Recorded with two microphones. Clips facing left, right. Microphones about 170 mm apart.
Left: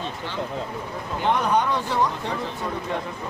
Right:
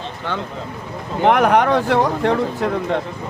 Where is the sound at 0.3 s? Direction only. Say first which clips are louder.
Right 7 dB; 60° right (ahead or behind).